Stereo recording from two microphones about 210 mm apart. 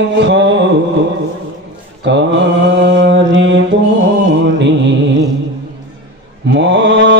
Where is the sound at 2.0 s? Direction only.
55° right (ahead or behind).